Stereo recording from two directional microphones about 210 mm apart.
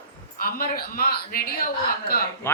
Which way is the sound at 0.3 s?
45° left (ahead or behind).